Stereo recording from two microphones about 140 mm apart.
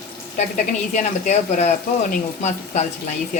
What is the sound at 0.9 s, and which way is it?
Speech, 55° left (ahead or behind).